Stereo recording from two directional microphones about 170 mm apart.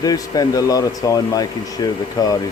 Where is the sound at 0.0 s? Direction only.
20° left (ahead or behind).